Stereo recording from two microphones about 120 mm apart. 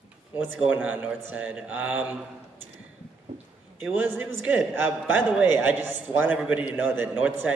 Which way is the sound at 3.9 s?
15° right (ahead or behind).